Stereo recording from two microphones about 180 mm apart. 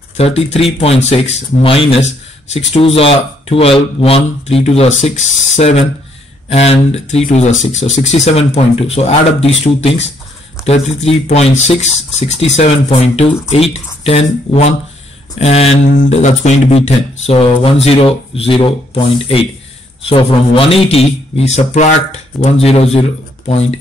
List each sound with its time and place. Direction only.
0.2 s speech: 35° left (ahead or behind)